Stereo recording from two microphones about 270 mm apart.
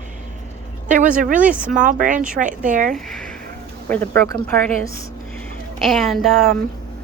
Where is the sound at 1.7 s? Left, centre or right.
Right.